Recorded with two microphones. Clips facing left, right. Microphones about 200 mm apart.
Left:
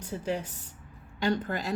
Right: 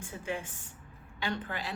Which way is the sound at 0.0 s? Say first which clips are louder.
Left 5 dB; 35° left (ahead or behind).